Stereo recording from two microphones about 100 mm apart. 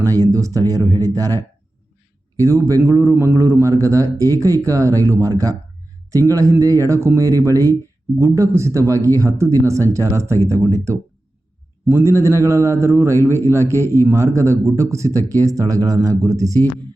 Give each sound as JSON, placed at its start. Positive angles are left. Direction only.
{"t": 0.0, "sound": "a man's voice", "side_deg": -35}